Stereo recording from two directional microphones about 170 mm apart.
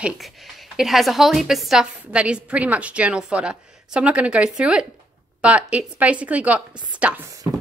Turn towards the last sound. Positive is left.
turn(degrees=-20)  # may be behind; listen again after turning